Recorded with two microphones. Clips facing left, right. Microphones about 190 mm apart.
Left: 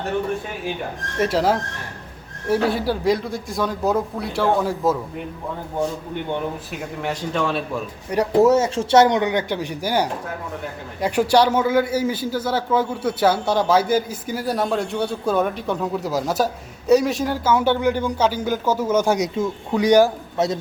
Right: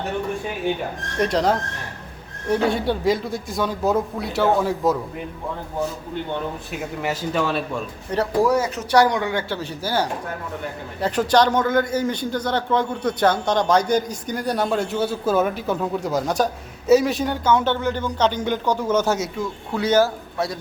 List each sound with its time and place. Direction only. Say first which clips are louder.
1.2 s a man's voice: left 1 dB; 5° left (ahead or behind)
6.7 s a man's voice: right 1 dB; 5° right (ahead or behind)
8.3 s a man's voice: left 5 dB; 25° left (ahead or behind)